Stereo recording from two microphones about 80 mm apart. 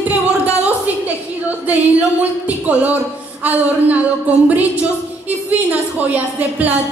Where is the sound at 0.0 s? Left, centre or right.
Centre.